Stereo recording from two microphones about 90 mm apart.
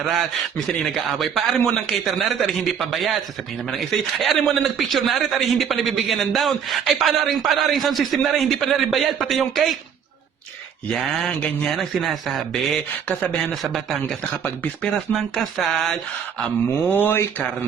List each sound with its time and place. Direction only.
0.0 s a man's voice: centre (ahead or behind)
10.8 s speech: 5° left (ahead or behind)
11.7 s a man's voice: centre (ahead or behind)
14.4 s speech: 15° left (ahead or behind)
15.1 s a man's voice: centre (ahead or behind)
16.9 s speech: 20° left (ahead or behind)